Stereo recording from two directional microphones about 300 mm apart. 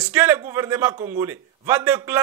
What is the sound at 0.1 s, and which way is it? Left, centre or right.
Speech, centre.